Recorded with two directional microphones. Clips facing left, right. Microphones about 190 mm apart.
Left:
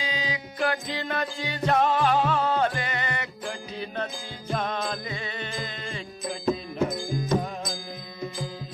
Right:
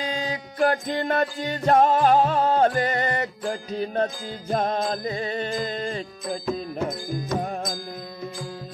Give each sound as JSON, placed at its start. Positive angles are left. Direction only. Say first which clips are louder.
{"t": 0.0, "sound": "music", "louder": "right 3 dB", "side_deg": -45}
{"t": 7.4, "sound": "music", "louder": "right 4 dB", "side_deg": -50}